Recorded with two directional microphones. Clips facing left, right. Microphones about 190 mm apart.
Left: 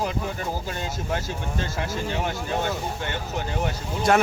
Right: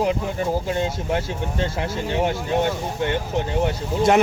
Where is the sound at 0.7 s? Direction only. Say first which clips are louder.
Right 6 dB; 25° right (ahead or behind).